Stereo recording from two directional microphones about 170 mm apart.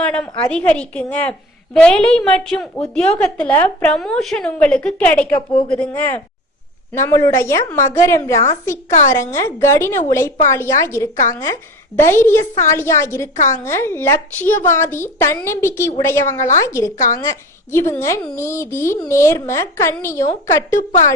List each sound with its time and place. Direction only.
0.1 s a woman's voice: 5° left (ahead or behind)